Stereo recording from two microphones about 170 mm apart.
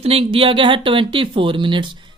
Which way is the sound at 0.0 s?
35° right (ahead or behind).